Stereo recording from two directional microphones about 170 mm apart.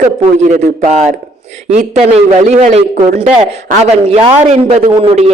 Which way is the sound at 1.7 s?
40° right (ahead or behind).